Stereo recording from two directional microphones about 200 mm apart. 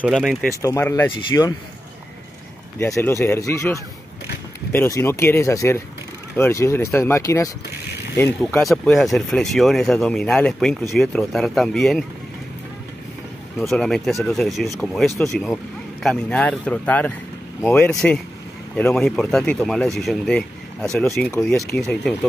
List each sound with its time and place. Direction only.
0.0 s speech: centre (ahead or behind)
0.6 s speech: 15° left (ahead or behind)
2.8 s speech: 10° left (ahead or behind)
13.6 s speech: 5° left (ahead or behind)